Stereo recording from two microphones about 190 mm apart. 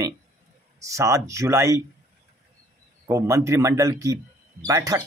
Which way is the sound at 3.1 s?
15° right (ahead or behind).